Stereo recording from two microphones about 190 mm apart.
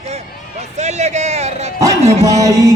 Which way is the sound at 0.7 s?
35° right (ahead or behind).